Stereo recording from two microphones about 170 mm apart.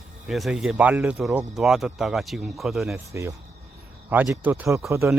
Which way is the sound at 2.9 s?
15° right (ahead or behind).